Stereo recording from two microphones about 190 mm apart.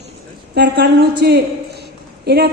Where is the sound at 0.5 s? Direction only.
60° right (ahead or behind).